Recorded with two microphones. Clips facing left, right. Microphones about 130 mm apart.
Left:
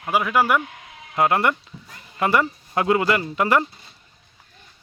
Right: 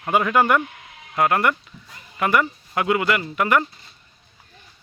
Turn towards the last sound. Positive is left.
turn(degrees=30)  # may be behind; listen again after turning